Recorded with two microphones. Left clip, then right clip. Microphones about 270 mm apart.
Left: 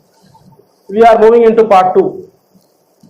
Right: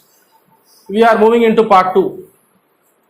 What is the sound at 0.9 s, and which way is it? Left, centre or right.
A man's voice, right.